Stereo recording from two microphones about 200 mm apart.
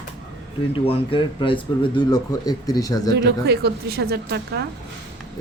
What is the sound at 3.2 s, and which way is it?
A woman's voice, 55° right (ahead or behind).